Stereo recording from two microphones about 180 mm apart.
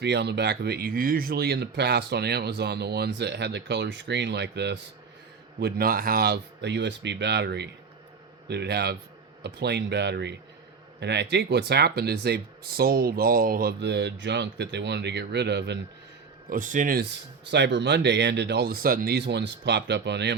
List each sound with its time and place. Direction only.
0.0 s speech: 70° right (ahead or behind)
5.5 s speech: 60° right (ahead or behind)
16.5 s speech: 45° right (ahead or behind)
17.5 s speech: 75° right (ahead or behind); by 19.2 s 55° right (ahead or behind)
19.3 s speech: 75° right (ahead or behind)